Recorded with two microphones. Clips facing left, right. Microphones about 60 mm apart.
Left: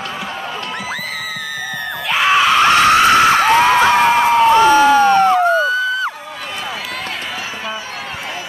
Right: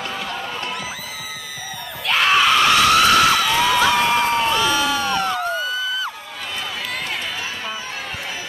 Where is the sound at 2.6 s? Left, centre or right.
Left.